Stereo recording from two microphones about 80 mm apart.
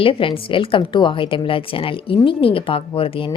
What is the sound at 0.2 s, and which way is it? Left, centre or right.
A woman's voice, left.